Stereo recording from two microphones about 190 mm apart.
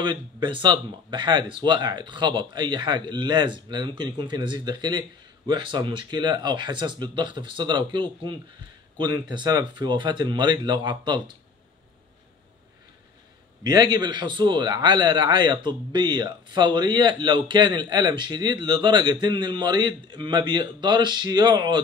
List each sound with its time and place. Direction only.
0.0 s a man's voice: 25° right (ahead or behind)
13.7 s a man's voice: 20° right (ahead or behind)